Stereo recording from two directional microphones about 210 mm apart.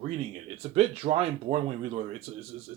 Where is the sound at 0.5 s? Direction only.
30° right (ahead or behind).